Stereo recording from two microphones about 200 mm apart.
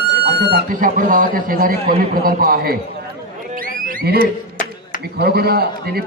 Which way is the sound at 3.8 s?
45° right (ahead or behind).